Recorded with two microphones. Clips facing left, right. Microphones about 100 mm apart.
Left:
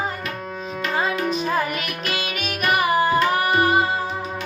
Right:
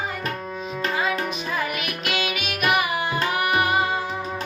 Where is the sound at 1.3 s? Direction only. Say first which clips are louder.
Left 5 dB; 35° left (ahead or behind).